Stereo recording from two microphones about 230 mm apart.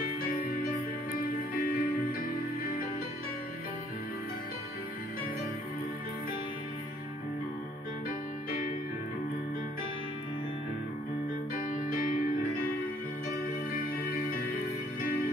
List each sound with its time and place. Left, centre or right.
1.5 s music: left
8.5 s music: left